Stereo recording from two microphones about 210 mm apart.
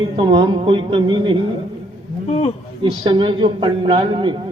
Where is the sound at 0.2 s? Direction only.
20° right (ahead or behind).